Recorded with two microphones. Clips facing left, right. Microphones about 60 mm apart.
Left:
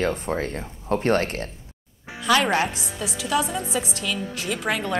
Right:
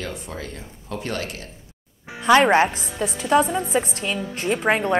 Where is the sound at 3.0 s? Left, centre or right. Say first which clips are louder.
Right 6 dB; right.